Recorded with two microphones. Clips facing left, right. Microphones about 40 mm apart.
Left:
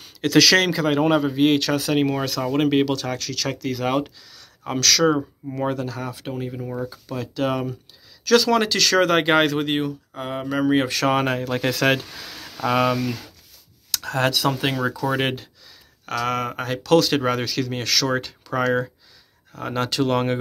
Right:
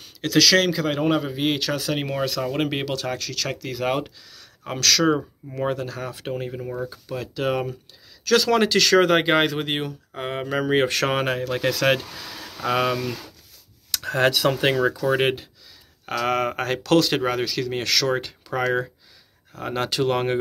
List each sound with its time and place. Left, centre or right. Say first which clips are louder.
0.2 s speech: left 2 dB; centre
1.2 s speech: left 5 dB; centre
2.6 s speech: left 5 dB; centre
4.0 s a sound: left 4 dB; centre
4.7 s speech: left 1 dB; right
9.2 s speech: left 2 dB; centre
9.5 s speech: left 3 dB; centre
9.8 s speech: left 3 dB; right
11.1 s speech: left 2 dB; centre
13.9 s speech: right 1 dB; right
15.0 s speech: right 2 dB; centre
16.1 s speech: right 1 dB; right
17.2 s speech: left 1 dB; centre